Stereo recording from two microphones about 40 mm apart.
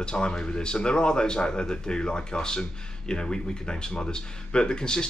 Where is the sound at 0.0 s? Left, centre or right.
Left.